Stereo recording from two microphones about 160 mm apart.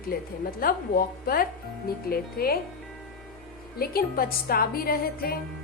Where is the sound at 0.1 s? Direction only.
75° left (ahead or behind).